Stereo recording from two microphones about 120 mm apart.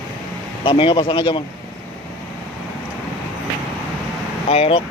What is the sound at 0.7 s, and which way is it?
Speech, 45° left (ahead or behind).